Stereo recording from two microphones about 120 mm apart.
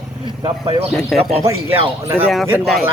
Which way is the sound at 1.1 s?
Centre (ahead or behind).